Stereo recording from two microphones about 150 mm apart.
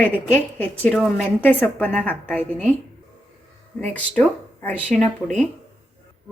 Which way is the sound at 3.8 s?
10° left (ahead or behind).